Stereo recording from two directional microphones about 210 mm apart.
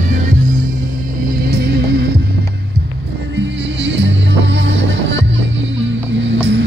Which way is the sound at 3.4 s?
55° right (ahead or behind).